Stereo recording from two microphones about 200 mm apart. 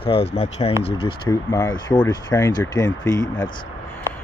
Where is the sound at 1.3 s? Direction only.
15° left (ahead or behind).